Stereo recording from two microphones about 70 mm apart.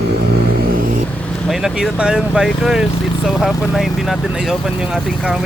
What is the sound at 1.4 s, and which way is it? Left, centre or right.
Speech, centre.